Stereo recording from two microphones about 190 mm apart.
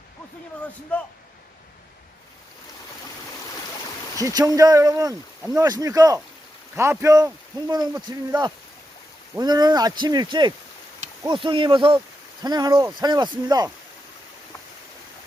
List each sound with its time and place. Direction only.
4.2 s speech: 20° right (ahead or behind)